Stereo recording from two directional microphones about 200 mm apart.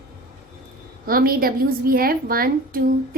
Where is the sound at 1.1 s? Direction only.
45° right (ahead or behind).